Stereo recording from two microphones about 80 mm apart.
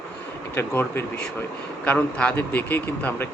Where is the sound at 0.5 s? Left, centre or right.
Left.